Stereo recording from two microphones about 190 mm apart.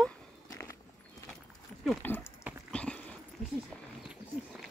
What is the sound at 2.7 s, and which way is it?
Dog, 5° left (ahead or behind).